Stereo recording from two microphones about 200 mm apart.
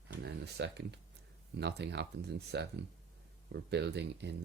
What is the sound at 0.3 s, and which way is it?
Speech, 55° right (ahead or behind).